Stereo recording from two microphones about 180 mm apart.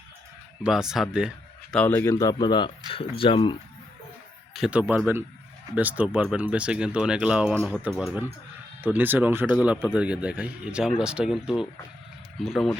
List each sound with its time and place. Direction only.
0.6 s speech: 5° right (ahead or behind)
1.7 s speech: 10° left (ahead or behind); by 3.6 s 25° left (ahead or behind)
4.5 s speech: 5° right (ahead or behind)